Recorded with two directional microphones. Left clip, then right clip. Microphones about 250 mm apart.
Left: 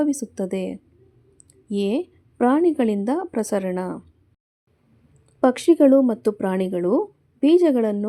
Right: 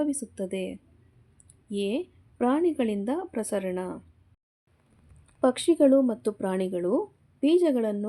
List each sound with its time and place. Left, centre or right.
0.0 s speech: centre
5.4 s speech: centre